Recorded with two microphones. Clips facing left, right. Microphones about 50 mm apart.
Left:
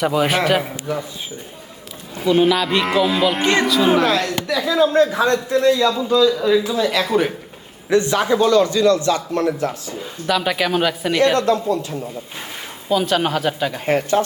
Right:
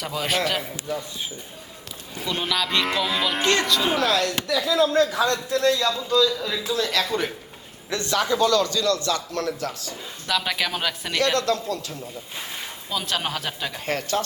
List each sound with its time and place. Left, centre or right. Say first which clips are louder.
0.0 s speech: left 8 dB; centre
2.2 s speech: left 10 dB; centre
4.1 s speech: left 3 dB; left
10.2 s speech: left 6 dB; centre
11.2 s speech: left 6 dB; left
12.9 s speech: left 9 dB; centre
13.8 s speech: left 8 dB; left